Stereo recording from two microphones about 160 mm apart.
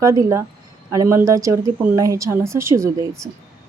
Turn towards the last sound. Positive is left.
turn(degrees=-20)  # may be behind; listen again after turning